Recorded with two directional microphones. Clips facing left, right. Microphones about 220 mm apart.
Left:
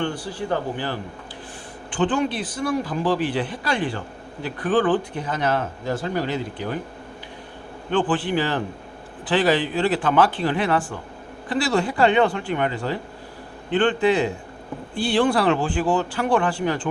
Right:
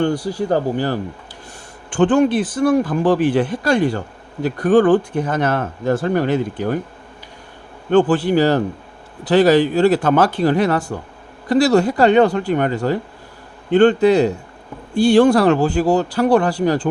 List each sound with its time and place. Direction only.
0.0 s speech: 40° right (ahead or behind)
7.9 s speech: 45° right (ahead or behind)